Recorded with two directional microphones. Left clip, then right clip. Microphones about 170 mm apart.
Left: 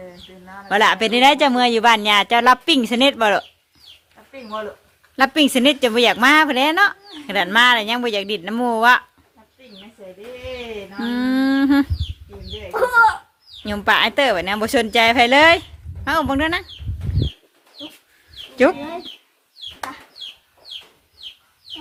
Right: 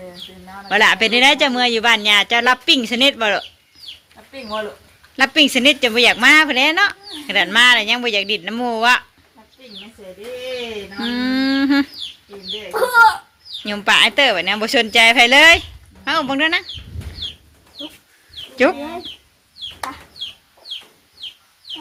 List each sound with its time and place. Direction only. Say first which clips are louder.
0.1 s speech: right 4 dB; 25° right (ahead or behind)
0.7 s speech: right 2 dB; 25° left (ahead or behind)
4.3 s speech: right 4 dB; 25° right (ahead or behind)
5.1 s a woman's voice: right 2 dB; 30° left (ahead or behind)
11.0 s speech: even; 25° left (ahead or behind)
12.7 s a child's voice: right 2 dB; centre (ahead or behind)
13.6 s speech: right 3 dB; 30° left (ahead or behind)
18.5 s speech: even; 30° left (ahead or behind)